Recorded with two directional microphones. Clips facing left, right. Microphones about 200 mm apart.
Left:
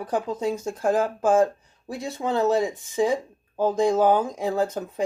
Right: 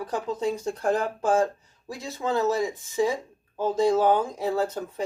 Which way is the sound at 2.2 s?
20° left (ahead or behind).